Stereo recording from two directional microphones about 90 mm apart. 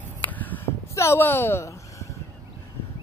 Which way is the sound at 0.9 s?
30° left (ahead or behind).